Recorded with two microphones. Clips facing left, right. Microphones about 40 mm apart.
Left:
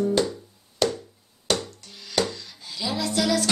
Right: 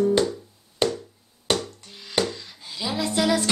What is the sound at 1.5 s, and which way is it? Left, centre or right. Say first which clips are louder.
Music: right 1 dB; right.